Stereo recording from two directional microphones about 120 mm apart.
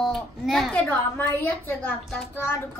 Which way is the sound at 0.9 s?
15° left (ahead or behind).